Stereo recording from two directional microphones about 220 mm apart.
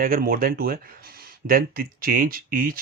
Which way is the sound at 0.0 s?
40° right (ahead or behind).